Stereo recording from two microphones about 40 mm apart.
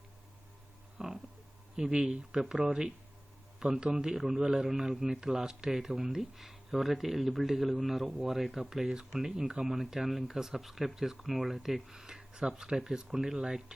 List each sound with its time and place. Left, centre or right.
0.9 s a sound: centre
1.7 s speech: centre
9.7 s speech: centre